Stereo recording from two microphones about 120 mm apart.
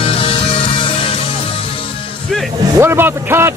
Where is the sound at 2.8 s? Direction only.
20° right (ahead or behind).